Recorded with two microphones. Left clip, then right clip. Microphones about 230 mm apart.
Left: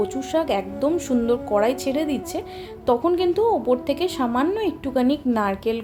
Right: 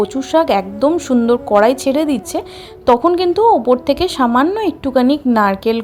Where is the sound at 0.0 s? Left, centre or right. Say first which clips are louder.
Right 9 dB; right.